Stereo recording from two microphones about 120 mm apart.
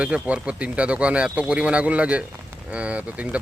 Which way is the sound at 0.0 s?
10° right (ahead or behind).